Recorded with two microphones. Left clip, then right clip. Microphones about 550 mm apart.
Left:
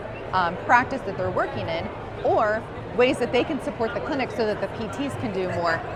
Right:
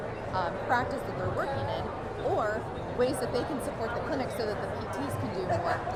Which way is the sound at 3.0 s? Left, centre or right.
Left.